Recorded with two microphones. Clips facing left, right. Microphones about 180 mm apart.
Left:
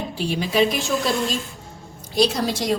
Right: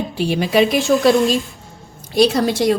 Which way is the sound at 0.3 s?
70° right (ahead or behind).